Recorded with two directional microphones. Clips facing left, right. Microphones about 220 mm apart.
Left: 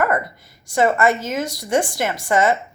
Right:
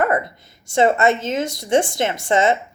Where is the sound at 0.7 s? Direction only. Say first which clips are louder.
Right 1 dB; 25° right (ahead or behind).